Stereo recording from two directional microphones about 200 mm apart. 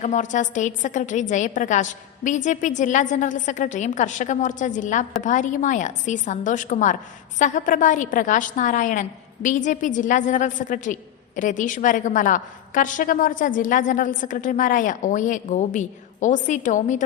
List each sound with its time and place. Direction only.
0.0 s a woman's voice: 40° left (ahead or behind)